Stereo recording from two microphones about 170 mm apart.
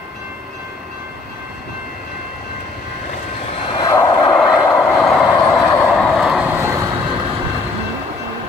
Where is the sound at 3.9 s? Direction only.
20° left (ahead or behind).